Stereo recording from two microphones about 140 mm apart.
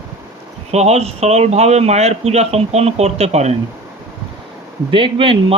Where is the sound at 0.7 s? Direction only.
50° right (ahead or behind).